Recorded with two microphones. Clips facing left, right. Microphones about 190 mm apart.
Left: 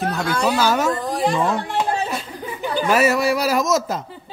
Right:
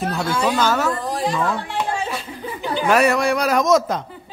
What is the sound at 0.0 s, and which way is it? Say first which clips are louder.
Speech: even; centre (ahead or behind).